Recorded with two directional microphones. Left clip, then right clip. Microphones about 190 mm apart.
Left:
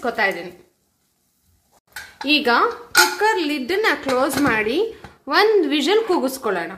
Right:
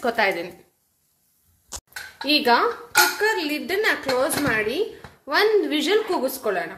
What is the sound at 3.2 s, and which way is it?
A woman's voice, 25° left (ahead or behind).